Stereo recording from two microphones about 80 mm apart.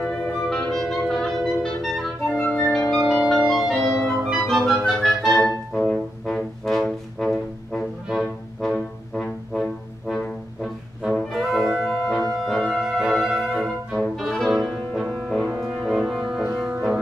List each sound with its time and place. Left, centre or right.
0.0 s clarinet: centre
2.3 s flute: centre
3.0 s music: centre
3.4 s clarinet: centre
5.8 s music: centre
12.6 s brass instrument: centre
13.4 s music: centre